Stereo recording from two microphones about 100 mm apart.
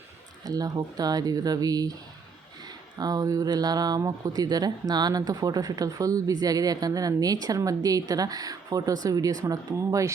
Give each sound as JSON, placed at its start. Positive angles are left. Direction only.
{"t": 0.4, "sound": "speech", "side_deg": -40}
{"t": 3.0, "sound": "speech", "side_deg": -40}